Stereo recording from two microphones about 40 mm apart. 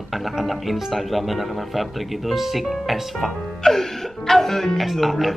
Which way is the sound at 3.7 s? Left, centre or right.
Centre.